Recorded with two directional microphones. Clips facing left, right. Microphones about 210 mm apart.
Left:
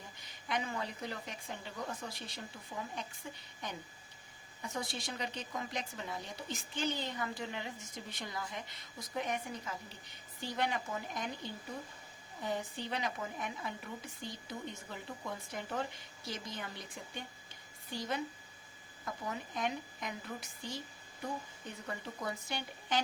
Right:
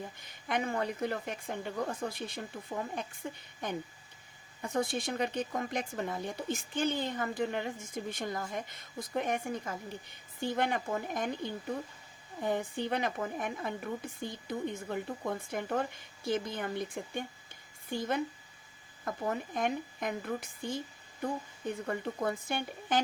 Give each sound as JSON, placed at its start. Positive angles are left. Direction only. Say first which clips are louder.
{"t": 0.2, "sound": "a woman's voice", "louder": "right 4 dB", "side_deg": -50}
{"t": 12.4, "sound": "a woman's voice", "louder": "right 6 dB", "side_deg": -55}
{"t": 21.8, "sound": "a woman's voice", "louder": "right 6 dB", "side_deg": -50}